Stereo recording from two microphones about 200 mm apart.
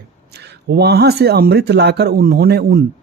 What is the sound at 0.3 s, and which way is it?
Speech, 55° right (ahead or behind).